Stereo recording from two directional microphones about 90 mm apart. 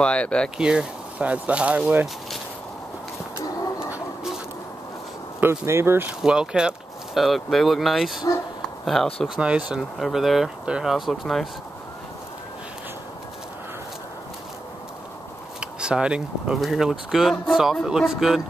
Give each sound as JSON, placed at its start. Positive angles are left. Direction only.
{"t": 0.0, "sound": "speech", "side_deg": 10}
{"t": 0.6, "sound": "speech", "side_deg": -10}
{"t": 5.4, "sound": "speech", "side_deg": -30}
{"t": 6.0, "sound": "speech", "side_deg": -10}
{"t": 9.4, "sound": "speech", "side_deg": -10}
{"t": 15.6, "sound": "speech", "side_deg": -10}